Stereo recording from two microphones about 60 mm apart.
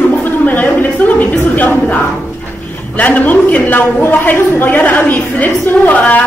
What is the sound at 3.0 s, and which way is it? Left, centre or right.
A woman's voice, left.